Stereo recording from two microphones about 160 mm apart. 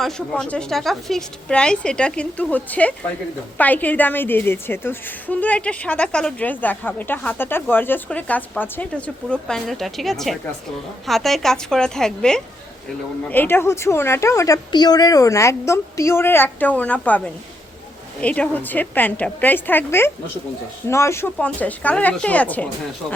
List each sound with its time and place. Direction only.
0.0 s a woman's voice: 5° left (ahead or behind)